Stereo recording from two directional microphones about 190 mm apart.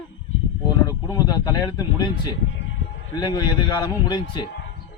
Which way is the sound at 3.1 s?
20° left (ahead or behind).